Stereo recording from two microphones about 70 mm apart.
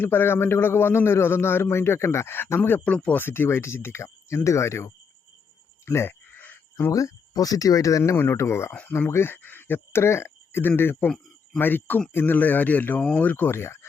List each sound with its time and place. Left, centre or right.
0.0 s a man's voice: left
2.8 s speech: centre
3.2 s a man's voice: left
5.8 s a sound: left
6.9 s speech: left
8.1 s a man's voice: left